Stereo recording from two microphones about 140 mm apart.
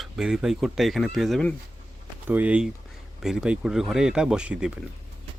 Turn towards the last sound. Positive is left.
turn(degrees=-5)  # may be behind; listen again after turning